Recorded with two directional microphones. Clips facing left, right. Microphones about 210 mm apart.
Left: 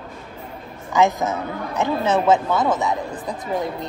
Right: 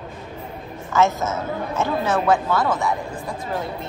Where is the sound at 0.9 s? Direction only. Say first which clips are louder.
Left 1 dB; 15° left (ahead or behind).